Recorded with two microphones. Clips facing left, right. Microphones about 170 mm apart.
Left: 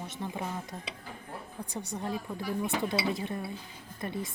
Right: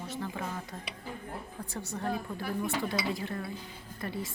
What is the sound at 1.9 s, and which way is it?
Speech, 15° left (ahead or behind).